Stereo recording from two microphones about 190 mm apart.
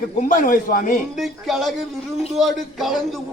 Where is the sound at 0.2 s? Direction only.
45° left (ahead or behind).